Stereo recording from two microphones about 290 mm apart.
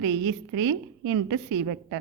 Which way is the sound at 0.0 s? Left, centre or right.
Right.